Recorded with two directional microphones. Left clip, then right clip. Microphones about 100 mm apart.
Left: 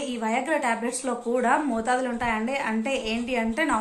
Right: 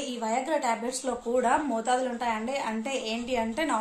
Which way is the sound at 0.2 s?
5° right (ahead or behind).